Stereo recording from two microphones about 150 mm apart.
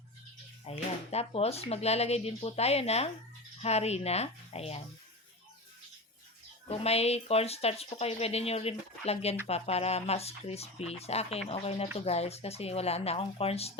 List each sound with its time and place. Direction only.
0.7 s speech: 45° left (ahead or behind)
6.7 s speech: 45° left (ahead or behind)